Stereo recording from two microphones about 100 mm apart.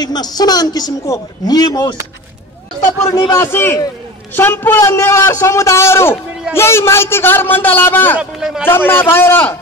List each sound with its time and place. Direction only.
0.0 s a man's voice: 45° left (ahead or behind)
3.3 s a man's voice: 25° left (ahead or behind)
8.2 s speech: 5° right (ahead or behind)
8.6 s a man's voice: 20° left (ahead or behind)